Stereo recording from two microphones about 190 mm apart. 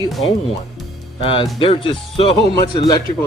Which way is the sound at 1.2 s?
25° left (ahead or behind).